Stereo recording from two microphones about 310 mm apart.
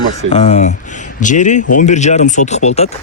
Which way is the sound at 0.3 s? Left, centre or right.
Left.